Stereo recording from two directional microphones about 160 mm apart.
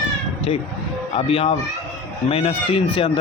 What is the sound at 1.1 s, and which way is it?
Speech, 35° left (ahead or behind).